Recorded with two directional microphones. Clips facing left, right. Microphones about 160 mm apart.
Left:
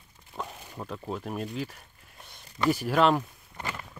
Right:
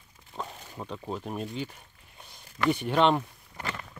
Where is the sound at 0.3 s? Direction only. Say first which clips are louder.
Even; 15° right (ahead or behind).